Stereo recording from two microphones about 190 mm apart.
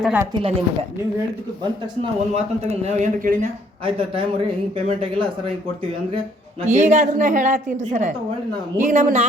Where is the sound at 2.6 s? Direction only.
35° right (ahead or behind).